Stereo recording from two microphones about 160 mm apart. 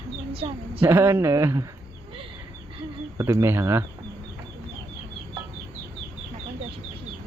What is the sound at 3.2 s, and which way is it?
Speech, 20° right (ahead or behind).